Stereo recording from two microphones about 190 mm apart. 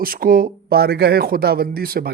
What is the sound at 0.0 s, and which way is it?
A man's voice, 50° right (ahead or behind).